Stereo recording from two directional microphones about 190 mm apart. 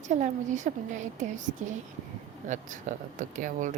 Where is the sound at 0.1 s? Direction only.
40° right (ahead or behind).